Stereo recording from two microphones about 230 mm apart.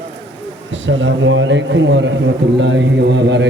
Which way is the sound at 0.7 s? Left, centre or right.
Right.